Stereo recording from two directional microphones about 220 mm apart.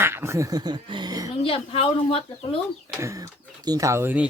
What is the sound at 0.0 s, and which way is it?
Speech, 10° right (ahead or behind).